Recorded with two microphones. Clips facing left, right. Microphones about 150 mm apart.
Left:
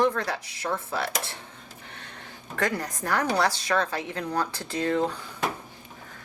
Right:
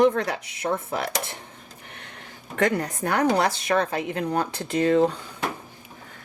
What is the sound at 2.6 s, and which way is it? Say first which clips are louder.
Speech: right 5 dB; 25° right (ahead or behind).